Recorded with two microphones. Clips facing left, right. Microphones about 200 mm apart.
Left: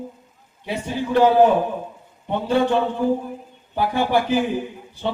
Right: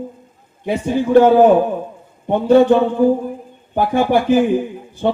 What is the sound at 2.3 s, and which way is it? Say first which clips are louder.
Speech: right 9 dB; 45° right (ahead or behind).